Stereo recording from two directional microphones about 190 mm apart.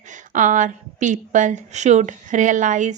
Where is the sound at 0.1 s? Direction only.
40° right (ahead or behind).